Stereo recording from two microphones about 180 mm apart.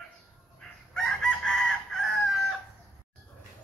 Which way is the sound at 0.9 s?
5° left (ahead or behind).